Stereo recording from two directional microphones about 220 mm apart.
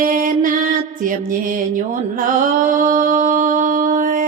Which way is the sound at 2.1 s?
40° right (ahead or behind).